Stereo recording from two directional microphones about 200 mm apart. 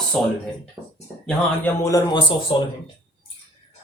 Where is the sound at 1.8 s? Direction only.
20° left (ahead or behind).